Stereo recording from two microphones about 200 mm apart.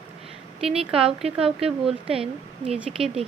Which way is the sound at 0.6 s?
30° right (ahead or behind).